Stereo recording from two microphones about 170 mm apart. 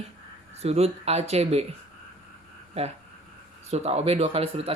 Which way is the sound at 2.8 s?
40° right (ahead or behind).